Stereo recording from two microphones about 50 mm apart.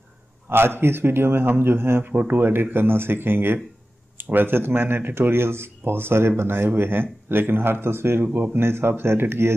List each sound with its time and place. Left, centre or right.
0.5 s speech: right